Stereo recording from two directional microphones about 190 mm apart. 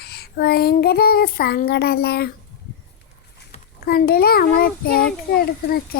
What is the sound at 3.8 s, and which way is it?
A child's voice, 55° left (ahead or behind).